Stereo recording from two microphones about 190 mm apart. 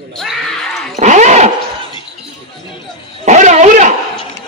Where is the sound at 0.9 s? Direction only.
40° right (ahead or behind).